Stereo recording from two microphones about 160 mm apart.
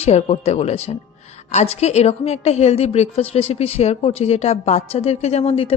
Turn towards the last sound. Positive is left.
turn(degrees=35)  # may be behind; listen again after turning